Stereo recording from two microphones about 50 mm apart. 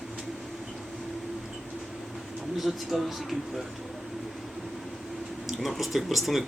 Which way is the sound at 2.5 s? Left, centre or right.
Centre.